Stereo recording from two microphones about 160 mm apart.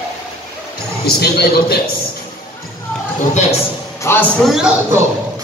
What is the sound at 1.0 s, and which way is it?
Speech, 80° left.